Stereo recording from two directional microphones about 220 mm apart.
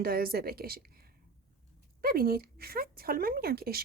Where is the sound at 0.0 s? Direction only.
45° right (ahead or behind).